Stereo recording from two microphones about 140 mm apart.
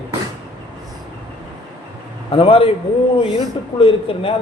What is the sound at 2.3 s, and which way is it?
Speech, 40° left (ahead or behind).